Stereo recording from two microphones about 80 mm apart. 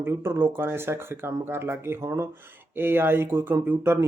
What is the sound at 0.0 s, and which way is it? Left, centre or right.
Speech, right.